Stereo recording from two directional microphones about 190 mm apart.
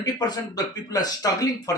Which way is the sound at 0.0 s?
20° left (ahead or behind).